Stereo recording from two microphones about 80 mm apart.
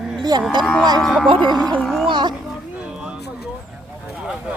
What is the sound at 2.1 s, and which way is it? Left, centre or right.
Speech, right.